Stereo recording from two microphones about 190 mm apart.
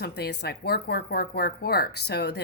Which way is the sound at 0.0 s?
60° left (ahead or behind).